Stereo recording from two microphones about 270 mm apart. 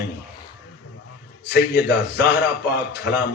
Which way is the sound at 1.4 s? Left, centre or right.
Left.